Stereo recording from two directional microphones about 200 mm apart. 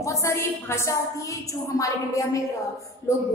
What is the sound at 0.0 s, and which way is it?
A woman's voice, 15° left (ahead or behind).